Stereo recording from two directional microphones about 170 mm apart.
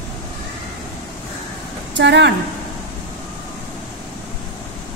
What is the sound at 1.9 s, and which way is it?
Speech, 90° right.